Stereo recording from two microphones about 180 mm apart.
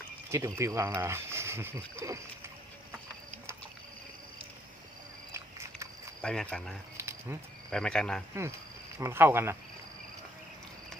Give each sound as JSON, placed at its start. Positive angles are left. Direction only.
{"t": 0.3, "sound": "speech", "side_deg": -15}
{"t": 5.3, "sound": "a sound", "side_deg": -15}
{"t": 6.2, "sound": "speech", "side_deg": 5}
{"t": 6.9, "sound": "cricket", "side_deg": -15}
{"t": 7.7, "sound": "speech", "side_deg": 5}
{"t": 9.0, "sound": "speech", "side_deg": -15}